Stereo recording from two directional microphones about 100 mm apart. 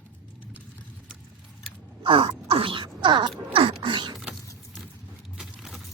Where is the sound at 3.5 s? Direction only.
60° right (ahead or behind).